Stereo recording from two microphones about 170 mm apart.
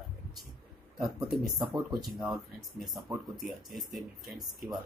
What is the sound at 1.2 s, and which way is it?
Speech, 5° right (ahead or behind).